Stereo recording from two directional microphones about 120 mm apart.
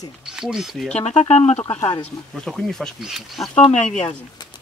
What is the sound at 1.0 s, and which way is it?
Speech, 65° left (ahead or behind).